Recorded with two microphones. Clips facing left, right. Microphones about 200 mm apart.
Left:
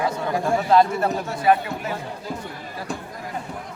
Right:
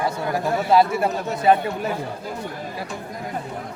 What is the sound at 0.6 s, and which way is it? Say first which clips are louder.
Speech: right 1 dB; 10° right (ahead or behind).